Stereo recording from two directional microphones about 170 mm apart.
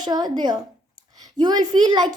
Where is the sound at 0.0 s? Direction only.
25° right (ahead or behind).